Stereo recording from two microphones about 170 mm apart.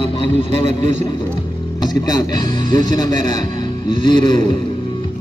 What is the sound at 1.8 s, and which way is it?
Speech, 25° left (ahead or behind).